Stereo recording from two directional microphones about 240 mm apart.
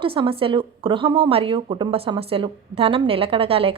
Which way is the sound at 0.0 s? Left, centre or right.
Right.